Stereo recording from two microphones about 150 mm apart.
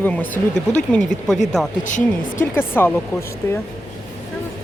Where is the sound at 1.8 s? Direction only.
60° left (ahead or behind).